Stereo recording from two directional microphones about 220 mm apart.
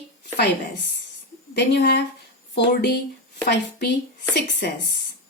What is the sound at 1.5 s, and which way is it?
A woman's voice, 50° left (ahead or behind).